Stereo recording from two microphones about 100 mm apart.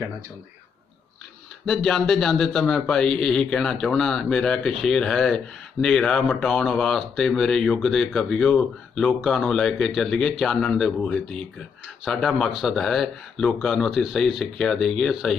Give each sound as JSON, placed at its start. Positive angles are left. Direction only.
{"t": 1.6, "sound": "a man's voice", "side_deg": 0}
{"t": 8.5, "sound": "a man's voice", "side_deg": 10}